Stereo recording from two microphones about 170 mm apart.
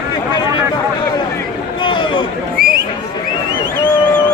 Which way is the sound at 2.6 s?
60° right (ahead or behind).